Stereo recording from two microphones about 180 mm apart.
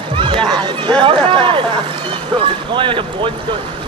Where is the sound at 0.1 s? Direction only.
30° right (ahead or behind).